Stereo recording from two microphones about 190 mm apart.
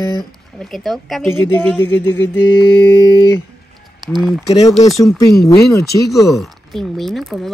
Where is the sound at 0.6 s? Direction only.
Centre (ahead or behind).